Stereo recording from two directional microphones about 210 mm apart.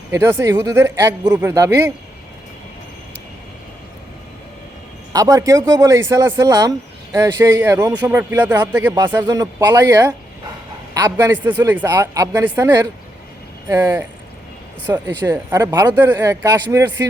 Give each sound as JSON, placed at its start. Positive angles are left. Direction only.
{"t": 0.1, "sound": "a man's voice", "side_deg": -10}
{"t": 5.1, "sound": "a man's voice", "side_deg": -15}